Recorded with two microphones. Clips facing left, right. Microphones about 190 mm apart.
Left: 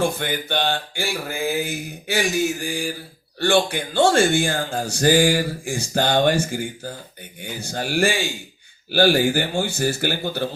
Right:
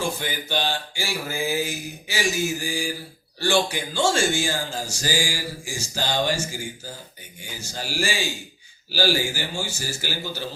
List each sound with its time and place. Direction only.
0.0 s a man's voice: 55° left (ahead or behind)